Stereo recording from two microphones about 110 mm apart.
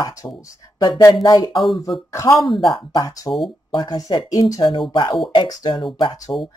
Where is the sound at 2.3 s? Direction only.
Centre (ahead or behind).